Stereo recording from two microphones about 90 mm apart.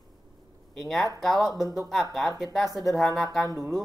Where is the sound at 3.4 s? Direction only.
40° right (ahead or behind).